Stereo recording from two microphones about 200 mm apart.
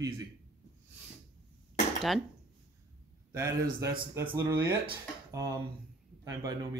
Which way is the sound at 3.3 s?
15° right (ahead or behind).